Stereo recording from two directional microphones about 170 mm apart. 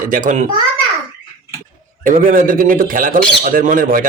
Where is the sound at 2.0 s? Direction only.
55° right (ahead or behind).